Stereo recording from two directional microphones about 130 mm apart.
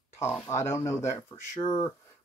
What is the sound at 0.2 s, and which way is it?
Speech, 20° left (ahead or behind).